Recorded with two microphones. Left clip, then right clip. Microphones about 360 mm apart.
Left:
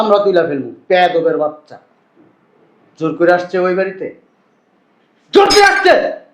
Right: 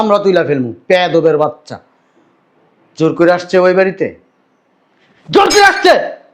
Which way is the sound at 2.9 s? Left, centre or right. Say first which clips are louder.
Right 2 dB; right.